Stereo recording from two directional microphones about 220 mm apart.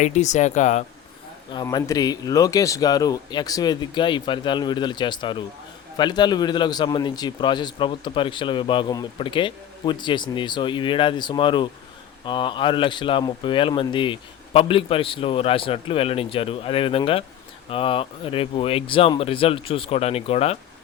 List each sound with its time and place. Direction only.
0.0 s speech: 30° left (ahead or behind)
1.5 s a man's voice: 15° left (ahead or behind)